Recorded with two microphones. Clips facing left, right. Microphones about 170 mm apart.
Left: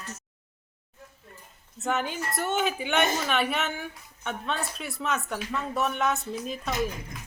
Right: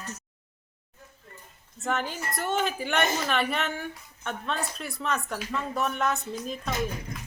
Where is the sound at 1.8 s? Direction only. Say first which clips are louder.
Left 1 dB; centre (ahead or behind).